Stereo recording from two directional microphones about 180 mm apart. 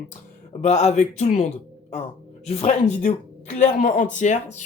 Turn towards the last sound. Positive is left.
turn(degrees=40)  # may be behind; listen again after turning